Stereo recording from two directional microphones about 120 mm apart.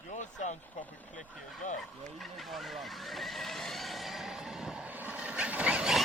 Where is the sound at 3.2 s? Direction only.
Centre (ahead or behind).